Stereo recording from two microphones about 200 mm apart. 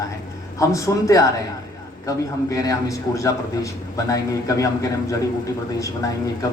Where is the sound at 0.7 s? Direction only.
15° left (ahead or behind).